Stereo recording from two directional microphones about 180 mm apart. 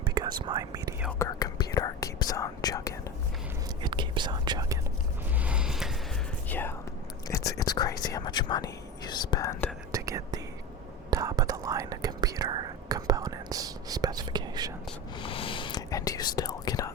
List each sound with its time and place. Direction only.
0.0 s speech: 25° right (ahead or behind)
1.2 s speech: 20° left (ahead or behind)
3.8 s whispering: 25° right (ahead or behind)
5.4 s a sound: 5° right (ahead or behind)
6.5 s whispering: 10° left (ahead or behind)
7.3 s speech: 15° left (ahead or behind)
9.9 s whispering: 20° right (ahead or behind)
15.2 s whispering: 30° left (ahead or behind)